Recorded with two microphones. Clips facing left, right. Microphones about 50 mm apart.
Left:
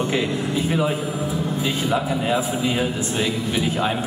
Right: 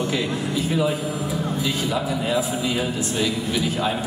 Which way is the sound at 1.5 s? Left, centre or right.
Left.